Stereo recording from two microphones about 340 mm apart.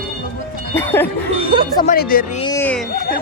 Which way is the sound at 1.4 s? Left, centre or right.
Centre.